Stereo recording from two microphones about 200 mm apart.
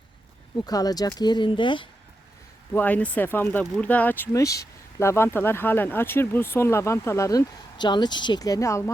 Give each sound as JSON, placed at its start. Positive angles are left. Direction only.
{"t": 0.6, "sound": "speech", "side_deg": 20}
{"t": 2.7, "sound": "speech", "side_deg": 10}